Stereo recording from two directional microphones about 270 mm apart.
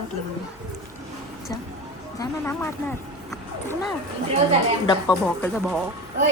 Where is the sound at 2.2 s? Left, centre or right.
Centre.